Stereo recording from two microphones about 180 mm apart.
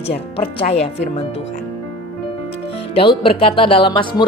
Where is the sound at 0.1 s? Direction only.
35° left (ahead or behind).